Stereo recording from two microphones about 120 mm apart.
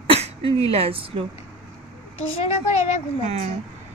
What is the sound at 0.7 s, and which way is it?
Speech, 50° right (ahead or behind).